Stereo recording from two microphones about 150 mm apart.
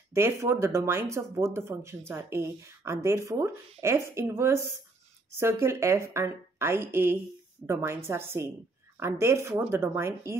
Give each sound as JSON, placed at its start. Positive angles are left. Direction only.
{"t": 0.1, "sound": "speech", "side_deg": -20}